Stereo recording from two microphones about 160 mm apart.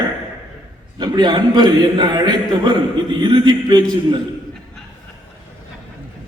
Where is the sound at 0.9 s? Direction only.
25° right (ahead or behind).